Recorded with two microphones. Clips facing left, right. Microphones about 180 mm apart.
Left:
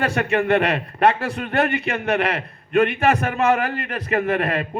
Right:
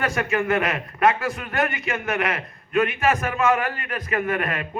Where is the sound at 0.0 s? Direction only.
35° left (ahead or behind).